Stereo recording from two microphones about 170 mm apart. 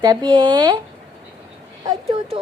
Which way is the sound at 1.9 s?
30° right (ahead or behind).